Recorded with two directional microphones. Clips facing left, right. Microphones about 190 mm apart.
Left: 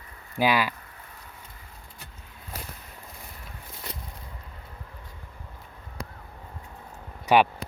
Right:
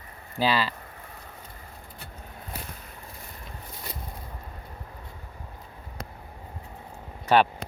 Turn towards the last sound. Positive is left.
turn(degrees=10)  # may be behind; listen again after turning